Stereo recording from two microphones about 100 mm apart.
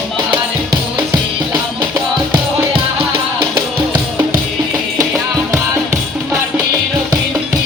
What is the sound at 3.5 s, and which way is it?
Music, 15° right (ahead or behind).